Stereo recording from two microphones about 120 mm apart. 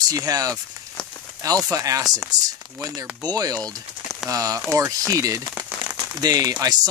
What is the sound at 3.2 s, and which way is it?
Speech, 30° right (ahead or behind).